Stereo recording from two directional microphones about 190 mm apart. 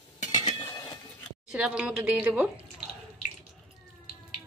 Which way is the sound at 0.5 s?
25° left (ahead or behind).